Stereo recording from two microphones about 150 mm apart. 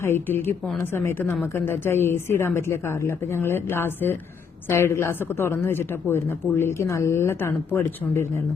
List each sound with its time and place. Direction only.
0.0 s speech: 15° left (ahead or behind)